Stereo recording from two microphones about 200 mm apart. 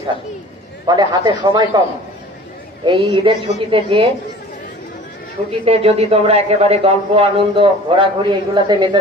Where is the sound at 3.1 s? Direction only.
25° right (ahead or behind).